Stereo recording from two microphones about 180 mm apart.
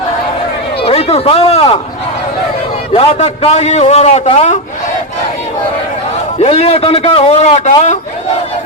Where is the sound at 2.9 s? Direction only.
35° left (ahead or behind).